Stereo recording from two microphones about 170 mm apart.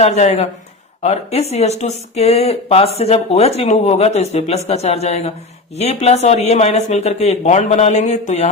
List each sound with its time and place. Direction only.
0.0 s speech: 40° left (ahead or behind)